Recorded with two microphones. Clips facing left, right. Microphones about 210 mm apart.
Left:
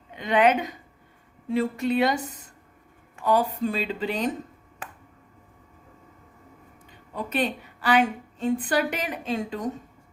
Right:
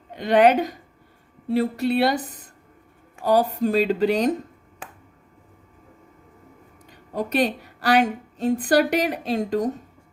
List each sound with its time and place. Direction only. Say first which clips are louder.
0.1 s a woman's voice: right 4 dB; 35° right (ahead or behind)
3.2 s a woman's voice: right 4 dB; 40° right (ahead or behind)
7.1 s a woman's voice: right 5 dB; 40° right (ahead or behind)